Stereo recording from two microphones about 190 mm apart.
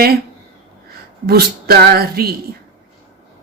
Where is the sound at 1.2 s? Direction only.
55° right (ahead or behind).